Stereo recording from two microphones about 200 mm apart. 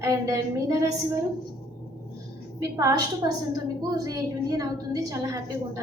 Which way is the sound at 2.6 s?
15° right (ahead or behind).